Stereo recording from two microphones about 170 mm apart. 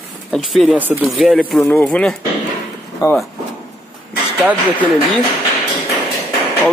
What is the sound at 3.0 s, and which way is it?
Speech, 20° left (ahead or behind).